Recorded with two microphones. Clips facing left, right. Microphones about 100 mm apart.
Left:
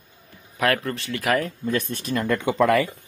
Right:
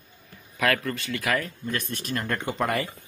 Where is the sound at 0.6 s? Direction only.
30° left (ahead or behind).